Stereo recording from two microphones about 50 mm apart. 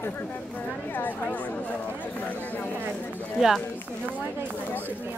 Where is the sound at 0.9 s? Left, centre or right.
Left.